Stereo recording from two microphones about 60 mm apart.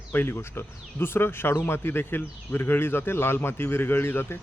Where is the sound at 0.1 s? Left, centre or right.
Left.